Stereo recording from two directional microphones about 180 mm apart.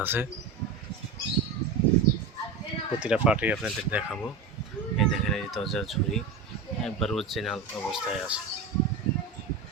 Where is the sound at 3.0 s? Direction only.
5° right (ahead or behind).